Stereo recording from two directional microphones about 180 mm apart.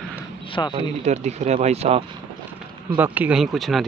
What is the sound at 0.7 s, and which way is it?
Speech, 35° right (ahead or behind).